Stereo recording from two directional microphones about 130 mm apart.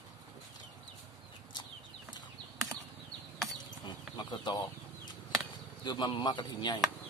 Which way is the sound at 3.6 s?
30° left (ahead or behind).